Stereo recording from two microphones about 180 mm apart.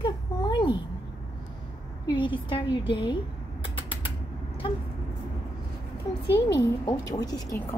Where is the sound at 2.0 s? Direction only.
25° left (ahead or behind).